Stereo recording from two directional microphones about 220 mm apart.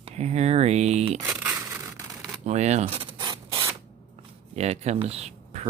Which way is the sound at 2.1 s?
Centre (ahead or behind).